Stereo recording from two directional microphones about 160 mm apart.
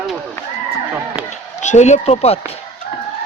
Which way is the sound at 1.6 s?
45° left (ahead or behind).